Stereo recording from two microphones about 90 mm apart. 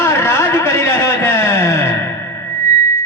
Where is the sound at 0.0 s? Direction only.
30° left (ahead or behind).